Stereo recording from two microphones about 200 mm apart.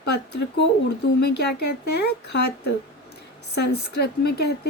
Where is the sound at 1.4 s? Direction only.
55° left (ahead or behind).